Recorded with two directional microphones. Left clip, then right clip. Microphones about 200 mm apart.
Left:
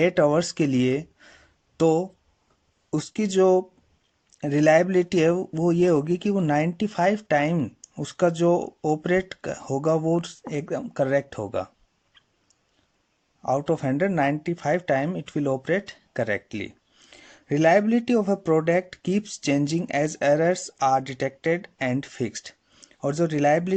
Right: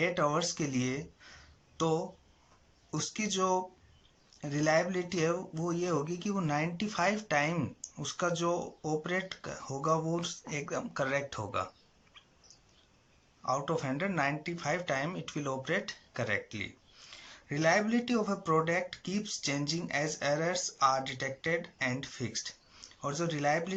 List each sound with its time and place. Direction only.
0.0 s speech: 50° left (ahead or behind)
13.4 s speech: 50° left (ahead or behind)